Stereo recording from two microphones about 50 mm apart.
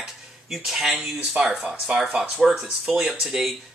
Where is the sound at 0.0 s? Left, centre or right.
Centre.